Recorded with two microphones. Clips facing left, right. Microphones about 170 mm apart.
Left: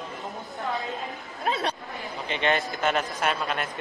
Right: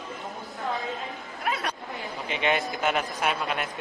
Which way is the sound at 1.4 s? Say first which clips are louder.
Left 3 dB; 25° left (ahead or behind).